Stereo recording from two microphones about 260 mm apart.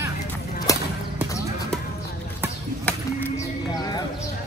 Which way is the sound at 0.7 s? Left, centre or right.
Centre.